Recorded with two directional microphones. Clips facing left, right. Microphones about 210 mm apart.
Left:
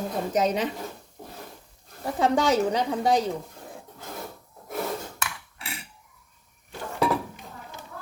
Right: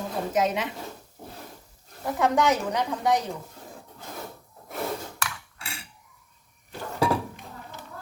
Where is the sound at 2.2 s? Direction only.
30° left (ahead or behind).